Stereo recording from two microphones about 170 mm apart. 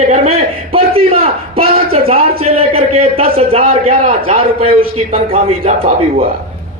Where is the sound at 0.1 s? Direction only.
35° right (ahead or behind).